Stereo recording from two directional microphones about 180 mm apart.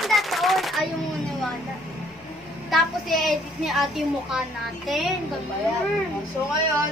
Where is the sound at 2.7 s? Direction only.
Centre (ahead or behind).